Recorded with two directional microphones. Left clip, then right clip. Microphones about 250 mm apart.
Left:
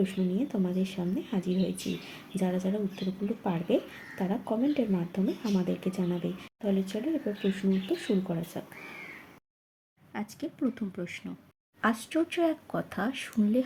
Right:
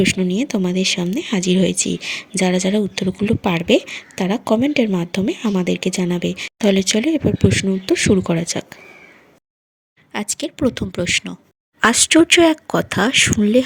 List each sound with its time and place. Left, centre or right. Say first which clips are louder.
0.0 s speech: right 13 dB; right
10.1 s speech: right 13 dB; right